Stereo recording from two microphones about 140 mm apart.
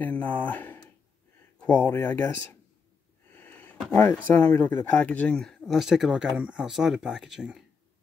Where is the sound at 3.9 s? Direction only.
15° left (ahead or behind); by 7.5 s 5° right (ahead or behind).